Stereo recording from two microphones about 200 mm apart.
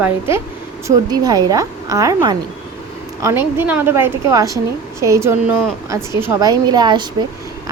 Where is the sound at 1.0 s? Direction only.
20° right (ahead or behind).